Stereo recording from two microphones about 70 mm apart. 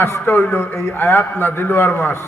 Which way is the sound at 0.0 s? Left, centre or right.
Left.